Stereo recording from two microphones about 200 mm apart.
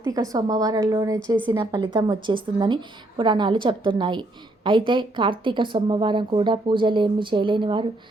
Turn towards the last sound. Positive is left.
turn(degrees=-25)  # may be behind; listen again after turning